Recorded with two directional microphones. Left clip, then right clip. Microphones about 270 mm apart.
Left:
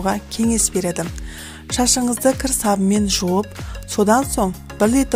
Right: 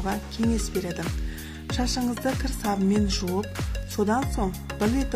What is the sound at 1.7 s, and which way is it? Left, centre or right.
Speech, left.